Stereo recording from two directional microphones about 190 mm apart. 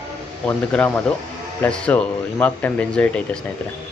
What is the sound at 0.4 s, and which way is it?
A man's voice, 10° left (ahead or behind).